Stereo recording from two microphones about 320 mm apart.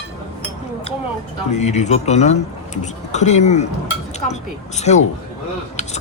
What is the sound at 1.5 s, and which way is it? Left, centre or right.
Speech, left.